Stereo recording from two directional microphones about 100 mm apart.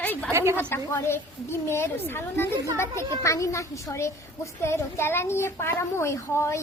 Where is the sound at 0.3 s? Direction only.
25° right (ahead or behind).